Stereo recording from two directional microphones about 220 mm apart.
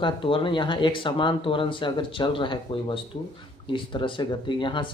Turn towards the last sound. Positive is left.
turn(degrees=20)  # may be behind; listen again after turning